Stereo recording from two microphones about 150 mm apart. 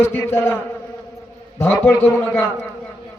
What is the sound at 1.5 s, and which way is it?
Speech, 10° left (ahead or behind).